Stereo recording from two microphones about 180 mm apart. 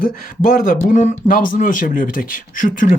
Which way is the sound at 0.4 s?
50° left (ahead or behind).